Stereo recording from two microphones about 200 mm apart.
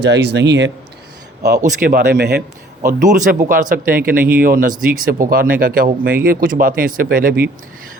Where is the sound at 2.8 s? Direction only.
40° right (ahead or behind).